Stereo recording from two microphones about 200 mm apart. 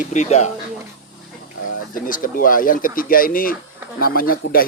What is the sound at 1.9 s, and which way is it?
Speech, 45° left (ahead or behind).